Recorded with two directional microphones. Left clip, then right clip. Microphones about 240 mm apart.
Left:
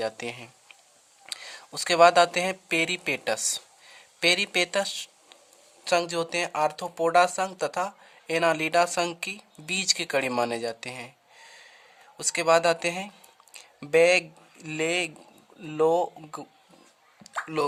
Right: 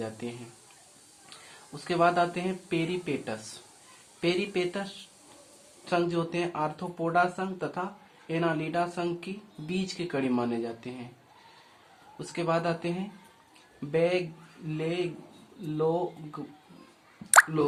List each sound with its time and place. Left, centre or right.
0.0 s speech: left
12.2 s speech: left